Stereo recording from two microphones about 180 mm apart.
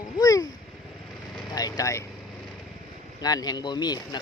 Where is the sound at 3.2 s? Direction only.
20° left (ahead or behind).